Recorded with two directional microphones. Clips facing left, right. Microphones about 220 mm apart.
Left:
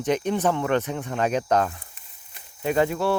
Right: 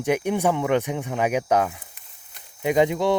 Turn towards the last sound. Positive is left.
turn(degrees=-15)  # may be behind; listen again after turning